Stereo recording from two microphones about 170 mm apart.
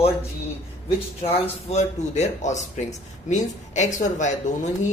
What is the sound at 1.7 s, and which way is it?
Speech, 40° left (ahead or behind).